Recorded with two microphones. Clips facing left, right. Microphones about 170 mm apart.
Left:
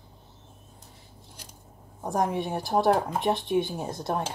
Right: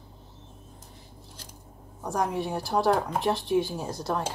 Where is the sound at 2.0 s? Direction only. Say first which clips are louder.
Left 1 dB; 20° left (ahead or behind).